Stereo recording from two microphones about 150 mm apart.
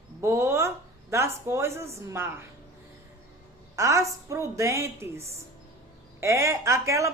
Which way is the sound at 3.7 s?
20° right (ahead or behind).